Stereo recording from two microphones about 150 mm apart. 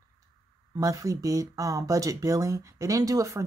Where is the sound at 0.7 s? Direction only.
20° right (ahead or behind).